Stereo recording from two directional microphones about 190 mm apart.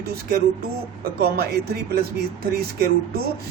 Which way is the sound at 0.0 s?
55° right (ahead or behind).